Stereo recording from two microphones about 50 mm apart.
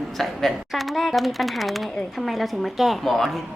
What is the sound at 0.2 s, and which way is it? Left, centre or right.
A woman's voice, centre.